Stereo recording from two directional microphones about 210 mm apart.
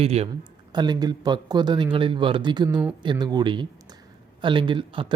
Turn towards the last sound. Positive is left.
turn(degrees=-25)  # may be behind; listen again after turning